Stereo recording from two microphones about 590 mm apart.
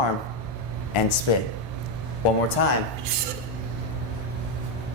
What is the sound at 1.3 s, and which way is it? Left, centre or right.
Speech, left.